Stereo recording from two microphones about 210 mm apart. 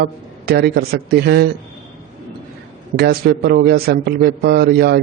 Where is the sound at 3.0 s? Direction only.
50° right (ahead or behind).